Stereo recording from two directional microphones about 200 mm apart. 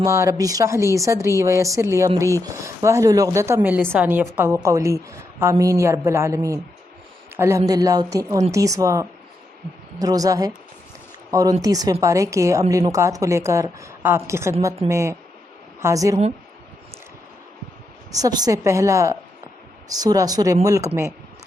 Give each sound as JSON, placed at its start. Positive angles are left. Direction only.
{"t": 0.0, "sound": "a woman's voice", "side_deg": -15}
{"t": 18.1, "sound": "a woman's voice", "side_deg": -20}